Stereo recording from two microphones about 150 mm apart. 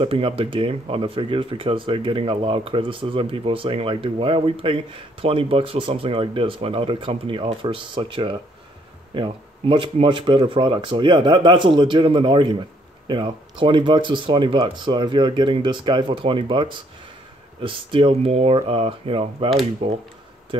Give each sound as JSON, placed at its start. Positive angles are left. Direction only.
{"t": 0.0, "sound": "speech", "side_deg": -35}